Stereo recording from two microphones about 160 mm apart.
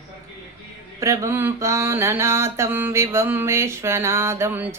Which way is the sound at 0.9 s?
20° right (ahead or behind).